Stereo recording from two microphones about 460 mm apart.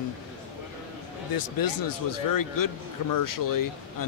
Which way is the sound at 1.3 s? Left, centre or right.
Left.